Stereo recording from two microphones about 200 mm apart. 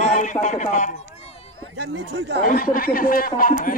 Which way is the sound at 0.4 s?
40° left (ahead or behind).